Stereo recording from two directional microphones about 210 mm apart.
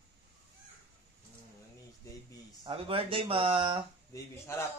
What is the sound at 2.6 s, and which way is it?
Speech, 25° right (ahead or behind).